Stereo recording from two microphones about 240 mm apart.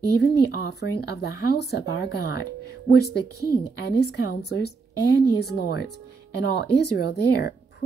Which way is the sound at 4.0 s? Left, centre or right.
Left.